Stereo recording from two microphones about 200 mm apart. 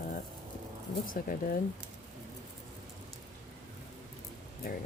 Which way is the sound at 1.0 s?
45° left (ahead or behind).